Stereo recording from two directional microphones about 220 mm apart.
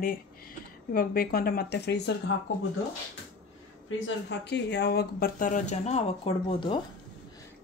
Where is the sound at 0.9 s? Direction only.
40° left (ahead or behind).